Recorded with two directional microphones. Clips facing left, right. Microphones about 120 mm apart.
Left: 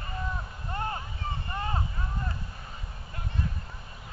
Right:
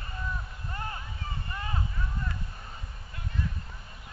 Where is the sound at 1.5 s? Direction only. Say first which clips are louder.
Left 4 dB; 35° left (ahead or behind).